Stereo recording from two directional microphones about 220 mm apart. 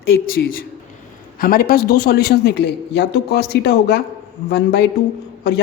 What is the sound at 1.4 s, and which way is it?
A man's voice, 40° left (ahead or behind).